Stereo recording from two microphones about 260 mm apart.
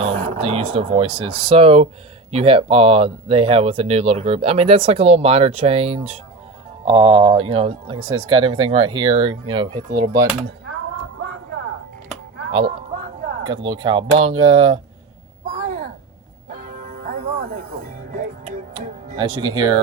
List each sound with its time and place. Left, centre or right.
0.0 s speech: right
12.5 s a sound: centre
13.4 s speech: centre
15.4 s a sound: right
16.5 s music: right
19.1 s speech: centre